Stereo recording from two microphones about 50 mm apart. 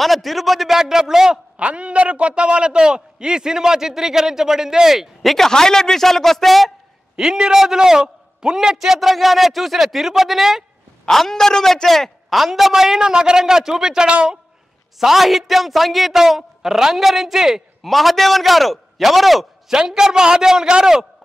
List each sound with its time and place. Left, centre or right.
0.0 s a man's voice: centre
1.7 s a man's voice: right; by 6.7 s centre
7.2 s a man's voice: centre
11.1 s a man's voice: centre; by 14.4 s right
15.0 s a man's voice: centre
17.8 s a man's voice: centre
19.8 s a man's voice: centre